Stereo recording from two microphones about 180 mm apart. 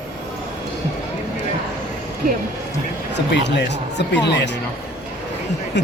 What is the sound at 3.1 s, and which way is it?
Speech, 75° left (ahead or behind).